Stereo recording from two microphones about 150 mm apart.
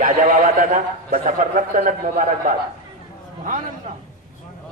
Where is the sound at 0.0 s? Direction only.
60° right (ahead or behind).